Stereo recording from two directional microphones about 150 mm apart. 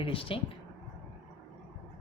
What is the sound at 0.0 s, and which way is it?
Speech, 35° left (ahead or behind).